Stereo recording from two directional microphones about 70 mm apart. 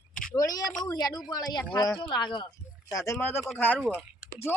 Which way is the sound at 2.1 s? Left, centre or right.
Left.